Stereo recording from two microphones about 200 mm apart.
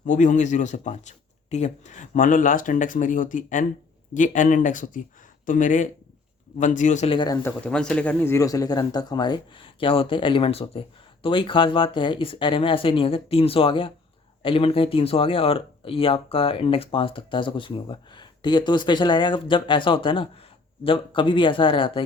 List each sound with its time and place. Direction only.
0.0 s a man's voice: 40° left (ahead or behind)
7.4 s speech: 5° left (ahead or behind); by 22.0 s 25° left (ahead or behind)